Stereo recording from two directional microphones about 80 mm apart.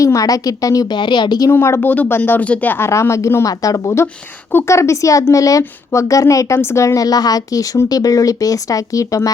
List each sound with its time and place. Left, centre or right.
0.0 s a woman's voice: left
0.9 s speech: left
1.5 s a woman's voice: left